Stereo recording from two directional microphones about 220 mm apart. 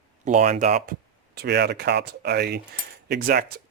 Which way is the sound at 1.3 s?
50° right (ahead or behind).